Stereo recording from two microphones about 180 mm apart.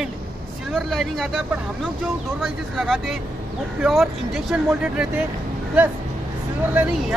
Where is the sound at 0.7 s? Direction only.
Centre (ahead or behind).